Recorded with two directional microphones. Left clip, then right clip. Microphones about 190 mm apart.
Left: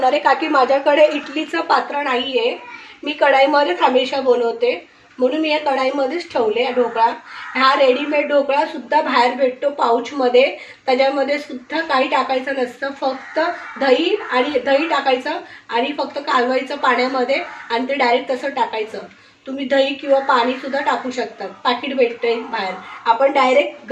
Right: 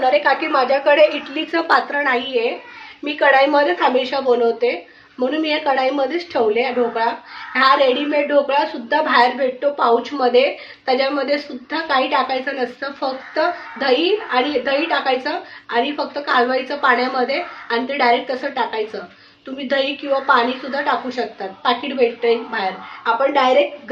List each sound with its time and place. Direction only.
0.0 s a woman's voice: 10° left (ahead or behind)
1.5 s a woman's voice: 10° right (ahead or behind)